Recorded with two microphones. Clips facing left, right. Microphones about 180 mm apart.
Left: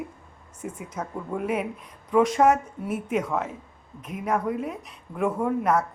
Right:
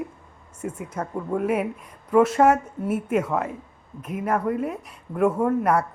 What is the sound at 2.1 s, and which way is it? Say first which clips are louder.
A woman's voice: right 2 dB; 5° right (ahead or behind).